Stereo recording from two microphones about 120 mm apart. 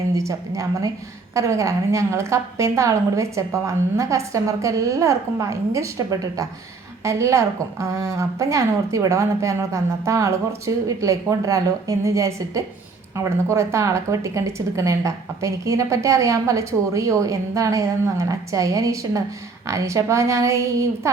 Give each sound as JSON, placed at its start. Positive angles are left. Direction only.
{"t": 0.1, "sound": "speech", "side_deg": -25}